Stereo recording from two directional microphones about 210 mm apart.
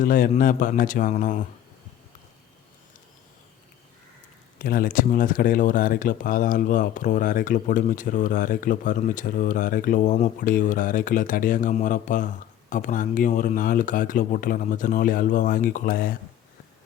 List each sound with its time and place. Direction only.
0.0 s speech: 40° left (ahead or behind)
4.6 s speech: 45° left (ahead or behind)